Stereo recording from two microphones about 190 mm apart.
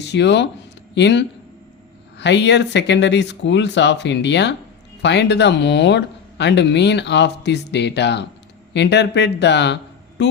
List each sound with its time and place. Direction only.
0.0 s speech: 65° left (ahead or behind)